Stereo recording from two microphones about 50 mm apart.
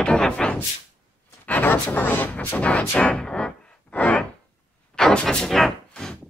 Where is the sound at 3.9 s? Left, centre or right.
Left.